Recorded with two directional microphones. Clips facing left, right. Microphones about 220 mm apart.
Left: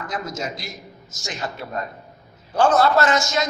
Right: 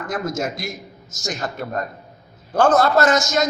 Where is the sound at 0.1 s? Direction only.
50° right (ahead or behind).